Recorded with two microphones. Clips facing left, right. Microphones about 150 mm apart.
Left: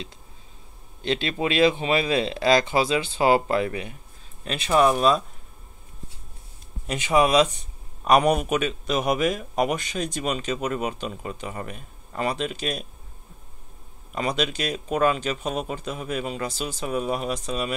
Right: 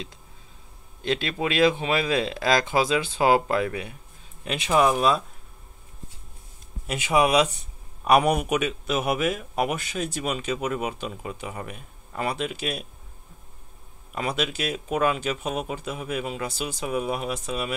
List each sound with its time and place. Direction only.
1.0 s a man's voice: 5° right (ahead or behind)
6.9 s a man's voice: 10° right (ahead or behind)
14.1 s a man's voice: 5° right (ahead or behind)